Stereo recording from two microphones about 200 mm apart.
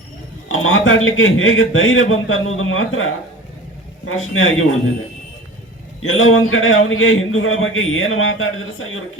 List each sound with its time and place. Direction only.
0.4 s a man's voice: 90° left
6.0 s a man's voice: 90° left